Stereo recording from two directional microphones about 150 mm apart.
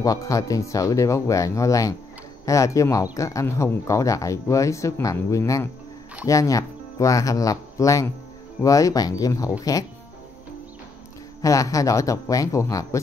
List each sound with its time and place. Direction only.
0.0 s speech: 25° left (ahead or behind)
11.4 s speech: 20° left (ahead or behind)